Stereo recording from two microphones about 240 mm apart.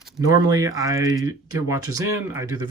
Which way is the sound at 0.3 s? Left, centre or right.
Centre.